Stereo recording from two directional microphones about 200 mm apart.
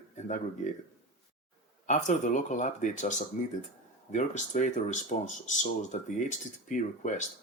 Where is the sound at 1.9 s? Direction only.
40° left (ahead or behind).